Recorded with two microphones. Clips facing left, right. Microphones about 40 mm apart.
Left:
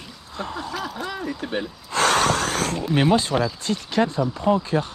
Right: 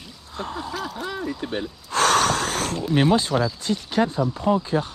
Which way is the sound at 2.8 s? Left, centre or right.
Centre.